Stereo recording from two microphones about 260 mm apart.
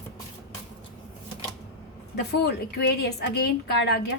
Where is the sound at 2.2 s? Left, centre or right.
Left.